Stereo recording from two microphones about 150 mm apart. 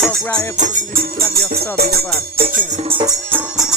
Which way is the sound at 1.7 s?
90° right.